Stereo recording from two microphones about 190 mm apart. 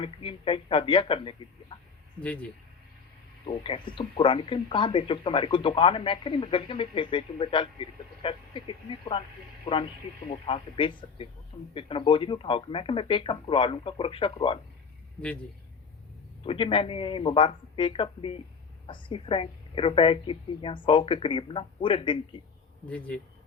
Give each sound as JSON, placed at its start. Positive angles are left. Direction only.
{"t": 0.0, "sound": "speech", "side_deg": 30}
{"t": 2.2, "sound": "speech", "side_deg": 5}
{"t": 3.4, "sound": "speech", "side_deg": 25}
{"t": 10.2, "sound": "speech", "side_deg": 30}
{"t": 16.4, "sound": "speech", "side_deg": 25}
{"t": 22.9, "sound": "speech", "side_deg": 5}